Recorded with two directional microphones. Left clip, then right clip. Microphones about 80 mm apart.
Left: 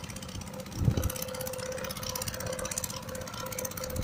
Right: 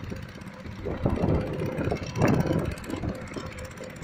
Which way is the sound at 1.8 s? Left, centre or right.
Left.